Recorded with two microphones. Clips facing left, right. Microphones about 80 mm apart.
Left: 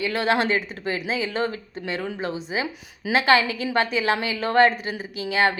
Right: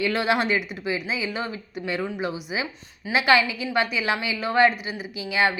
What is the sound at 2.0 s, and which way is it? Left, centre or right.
Speech, centre.